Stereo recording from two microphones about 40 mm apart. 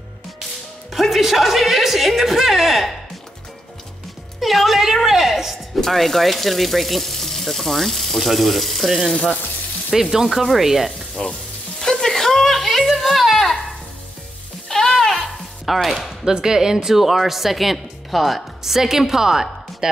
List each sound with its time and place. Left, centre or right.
0.9 s speech: centre
4.4 s a sound: centre
5.8 s speech: centre
9.8 s sizzle: centre
11.2 s frying: centre
11.8 s a sound: centre
14.7 s sizzle: centre
15.6 s chopping: centre
16.3 s a woman's voice: centre